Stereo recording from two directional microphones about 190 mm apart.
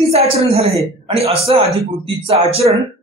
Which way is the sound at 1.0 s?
30° right (ahead or behind).